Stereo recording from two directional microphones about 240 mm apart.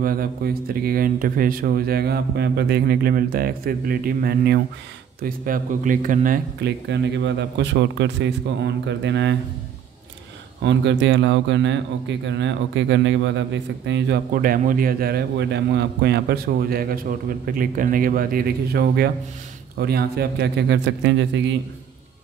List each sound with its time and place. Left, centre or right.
0.0 s a man's voice: right
10.6 s a man's voice: right